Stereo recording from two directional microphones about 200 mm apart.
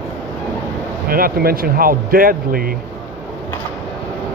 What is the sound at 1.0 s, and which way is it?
Speech, 45° right (ahead or behind).